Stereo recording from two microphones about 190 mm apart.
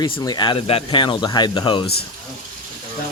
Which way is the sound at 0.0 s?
20° left (ahead or behind).